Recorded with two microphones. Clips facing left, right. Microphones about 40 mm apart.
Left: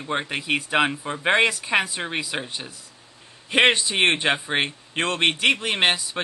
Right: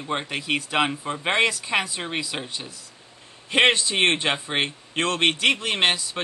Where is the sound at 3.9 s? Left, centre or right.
Centre.